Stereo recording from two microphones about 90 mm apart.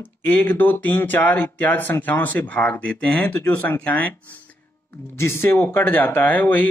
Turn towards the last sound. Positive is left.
turn(degrees=20)  # may be behind; listen again after turning